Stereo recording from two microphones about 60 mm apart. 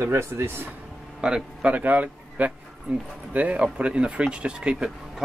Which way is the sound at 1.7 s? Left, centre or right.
Right.